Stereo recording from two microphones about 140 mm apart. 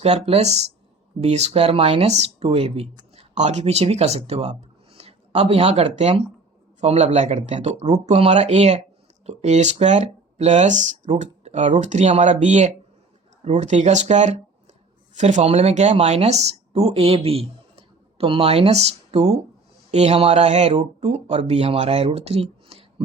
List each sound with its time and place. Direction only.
0.0 s speech: 45° right (ahead or behind)